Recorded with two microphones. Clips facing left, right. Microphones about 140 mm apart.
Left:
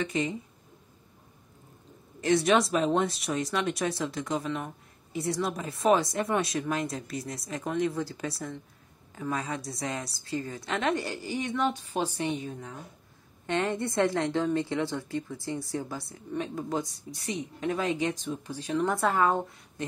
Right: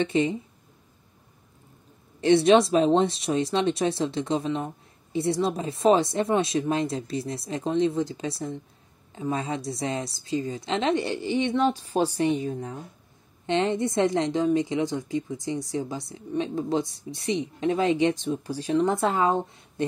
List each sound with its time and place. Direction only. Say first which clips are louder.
0.0 s speech: right 6 dB; 30° right (ahead or behind)
2.2 s speech: right 6 dB; 25° right (ahead or behind)
13.5 s speech: right 5 dB; 20° right (ahead or behind)
18.8 s speech: right 2 dB; 20° right (ahead or behind)